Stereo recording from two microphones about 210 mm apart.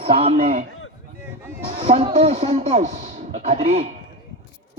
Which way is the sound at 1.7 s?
30° right (ahead or behind).